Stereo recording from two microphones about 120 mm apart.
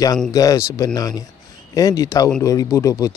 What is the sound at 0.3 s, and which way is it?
Speech, 30° left (ahead or behind).